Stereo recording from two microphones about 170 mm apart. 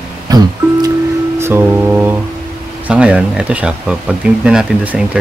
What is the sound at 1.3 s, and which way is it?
Speech, 15° right (ahead or behind).